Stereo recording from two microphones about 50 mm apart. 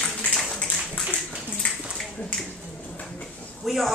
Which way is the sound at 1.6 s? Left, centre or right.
Left.